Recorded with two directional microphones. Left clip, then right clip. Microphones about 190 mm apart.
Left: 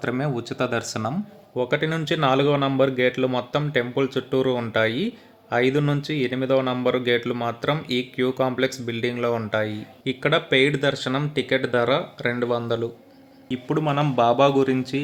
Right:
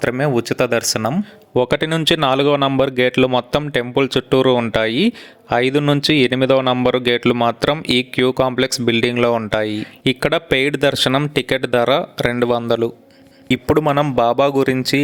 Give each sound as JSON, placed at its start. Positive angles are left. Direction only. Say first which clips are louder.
{"t": 0.0, "sound": "speech", "louder": "right 9 dB", "side_deg": -35}
{"t": 1.5, "sound": "speech", "louder": "right 7 dB", "side_deg": -55}